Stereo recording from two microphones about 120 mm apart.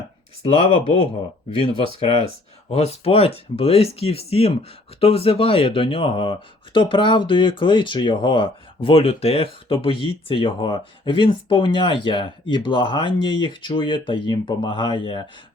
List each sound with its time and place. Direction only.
0.4 s speech: 55° left (ahead or behind)